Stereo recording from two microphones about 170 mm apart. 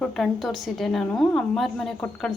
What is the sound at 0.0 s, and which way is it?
A woman's voice, centre (ahead or behind).